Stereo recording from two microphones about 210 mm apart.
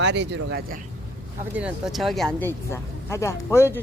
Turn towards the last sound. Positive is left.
turn(degrees=10)  # may be behind; listen again after turning